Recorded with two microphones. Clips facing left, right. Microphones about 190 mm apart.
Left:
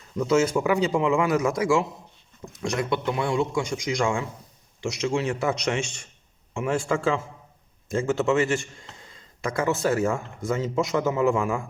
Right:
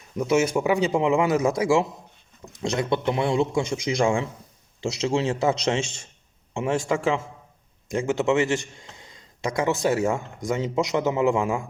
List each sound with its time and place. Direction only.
0.2 s a man's voice: 20° right (ahead or behind)